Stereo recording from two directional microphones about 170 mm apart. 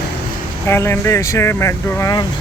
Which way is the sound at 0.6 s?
15° left (ahead or behind).